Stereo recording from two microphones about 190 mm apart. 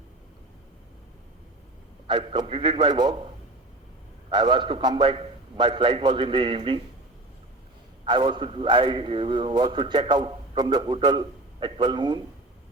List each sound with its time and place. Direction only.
2.0 s a man's voice: 25° right (ahead or behind)
4.3 s a man's voice: 25° right (ahead or behind)
8.0 s a man's voice: 25° right (ahead or behind)